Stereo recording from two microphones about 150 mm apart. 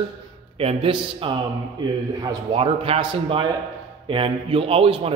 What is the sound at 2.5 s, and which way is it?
A man's voice, 40° right (ahead or behind).